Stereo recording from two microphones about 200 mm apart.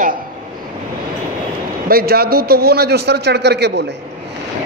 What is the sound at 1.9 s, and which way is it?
A woman's voice, 50° right (ahead or behind).